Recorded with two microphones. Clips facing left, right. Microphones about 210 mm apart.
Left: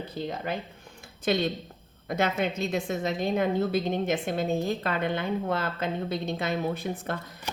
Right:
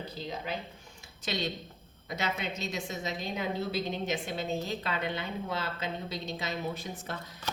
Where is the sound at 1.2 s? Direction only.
55° left (ahead or behind).